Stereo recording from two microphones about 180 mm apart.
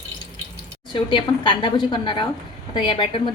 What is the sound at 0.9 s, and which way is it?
A woman's voice, 25° left (ahead or behind).